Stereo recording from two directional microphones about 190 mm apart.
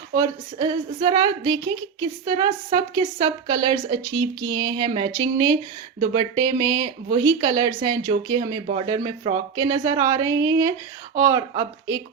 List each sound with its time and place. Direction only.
0.2 s speech: 25° right (ahead or behind)